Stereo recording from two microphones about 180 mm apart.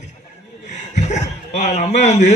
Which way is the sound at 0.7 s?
40° left (ahead or behind).